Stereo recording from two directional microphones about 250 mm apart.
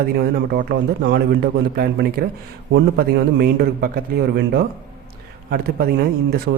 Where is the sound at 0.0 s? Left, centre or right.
Right.